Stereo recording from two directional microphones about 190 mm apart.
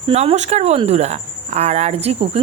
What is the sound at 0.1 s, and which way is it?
Speech, 35° right (ahead or behind).